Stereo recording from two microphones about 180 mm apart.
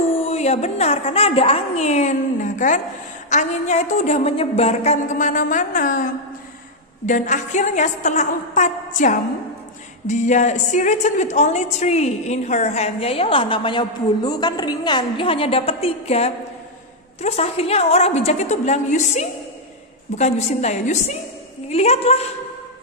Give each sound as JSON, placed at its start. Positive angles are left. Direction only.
{"t": 0.3, "sound": "a woman's voice", "side_deg": 35}